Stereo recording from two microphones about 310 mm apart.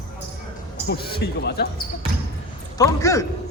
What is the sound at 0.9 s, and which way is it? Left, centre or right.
Speech, left.